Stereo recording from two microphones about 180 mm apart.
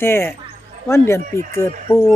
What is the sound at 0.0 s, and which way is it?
Speech, 15° left (ahead or behind).